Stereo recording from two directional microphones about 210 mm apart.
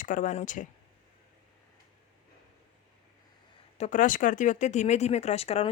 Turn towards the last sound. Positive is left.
turn(degrees=30)  # may be behind; listen again after turning